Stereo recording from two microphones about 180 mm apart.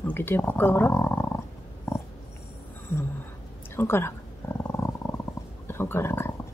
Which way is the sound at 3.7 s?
15° left (ahead or behind).